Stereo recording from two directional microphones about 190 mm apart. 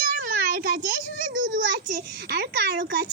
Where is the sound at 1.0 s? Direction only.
70° left (ahead or behind).